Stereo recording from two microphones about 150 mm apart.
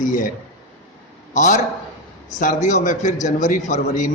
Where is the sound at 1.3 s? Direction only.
55° left (ahead or behind).